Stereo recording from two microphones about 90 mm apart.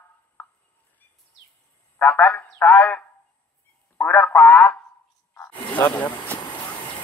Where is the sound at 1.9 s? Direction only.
20° left (ahead or behind).